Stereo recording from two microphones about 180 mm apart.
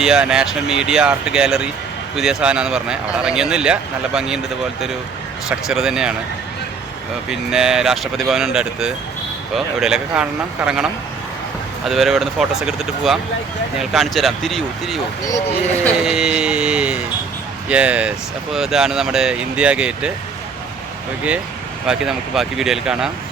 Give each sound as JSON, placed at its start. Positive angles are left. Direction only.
{"t": 0.0, "sound": "speech", "side_deg": -5}
{"t": 5.5, "sound": "speech", "side_deg": -5}
{"t": 7.3, "sound": "speech", "side_deg": -5}
{"t": 11.9, "sound": "speech", "side_deg": 0}
{"t": 15.2, "sound": "speech", "side_deg": 20}
{"t": 16.0, "sound": "speech", "side_deg": -5}
{"t": 21.8, "sound": "speech", "side_deg": -5}